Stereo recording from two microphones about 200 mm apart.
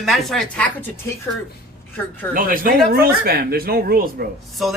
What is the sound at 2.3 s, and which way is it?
Speech, 45° right (ahead or behind).